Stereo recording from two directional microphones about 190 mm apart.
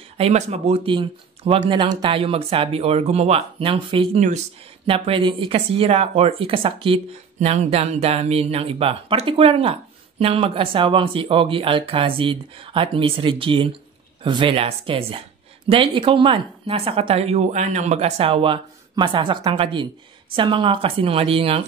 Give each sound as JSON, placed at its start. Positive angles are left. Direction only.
{"t": 0.2, "sound": "speech", "side_deg": -35}